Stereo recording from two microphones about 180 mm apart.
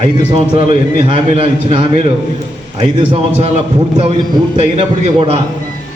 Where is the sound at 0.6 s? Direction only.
35° right (ahead or behind).